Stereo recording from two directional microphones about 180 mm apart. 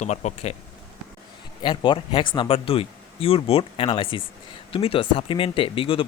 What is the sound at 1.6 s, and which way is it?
Speech, 25° left (ahead or behind).